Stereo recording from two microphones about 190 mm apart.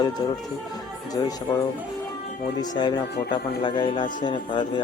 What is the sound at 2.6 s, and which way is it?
Speech, 20° left (ahead or behind).